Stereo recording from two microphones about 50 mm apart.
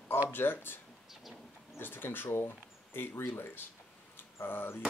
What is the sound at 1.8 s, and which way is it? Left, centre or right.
Speech, left.